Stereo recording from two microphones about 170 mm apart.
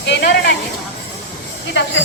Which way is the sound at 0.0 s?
85° left.